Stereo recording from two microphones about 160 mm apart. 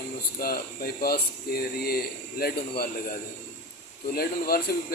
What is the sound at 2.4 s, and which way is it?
Speech, 65° left (ahead or behind).